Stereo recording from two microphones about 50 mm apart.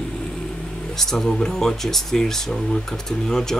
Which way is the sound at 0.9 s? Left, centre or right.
Centre.